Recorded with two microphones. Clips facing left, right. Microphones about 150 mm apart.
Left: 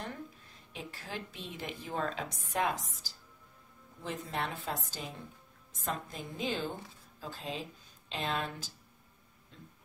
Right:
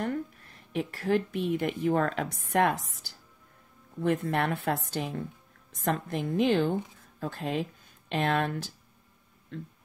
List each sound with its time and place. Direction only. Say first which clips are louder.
0.0 s a woman's voice: right 11 dB; 60° right (ahead or behind)